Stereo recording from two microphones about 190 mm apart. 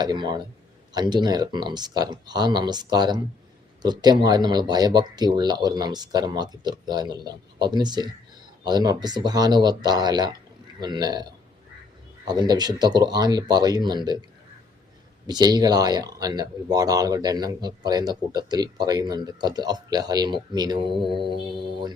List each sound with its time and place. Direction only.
0.0 s speech: 20° right (ahead or behind)
15.3 s speech: 20° right (ahead or behind)